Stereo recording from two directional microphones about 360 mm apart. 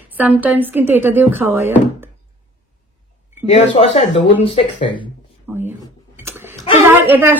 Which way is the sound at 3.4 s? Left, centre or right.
Centre.